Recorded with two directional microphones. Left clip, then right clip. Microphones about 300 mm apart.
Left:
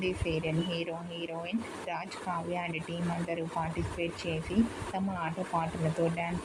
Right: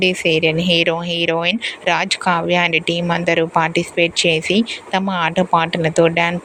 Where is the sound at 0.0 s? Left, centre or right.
Right.